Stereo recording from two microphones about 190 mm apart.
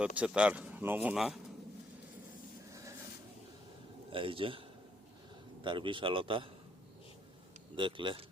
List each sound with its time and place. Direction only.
0.0 s speech: 5° right (ahead or behind)
4.1 s a man's voice: 25° right (ahead or behind)
5.6 s a man's voice: 25° right (ahead or behind)
7.8 s a man's voice: 25° right (ahead or behind)